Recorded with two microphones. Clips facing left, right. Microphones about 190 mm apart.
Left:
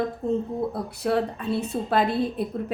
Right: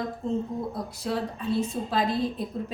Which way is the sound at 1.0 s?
65° left (ahead or behind).